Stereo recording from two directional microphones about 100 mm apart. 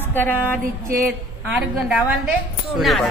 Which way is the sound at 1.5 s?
10° right (ahead or behind).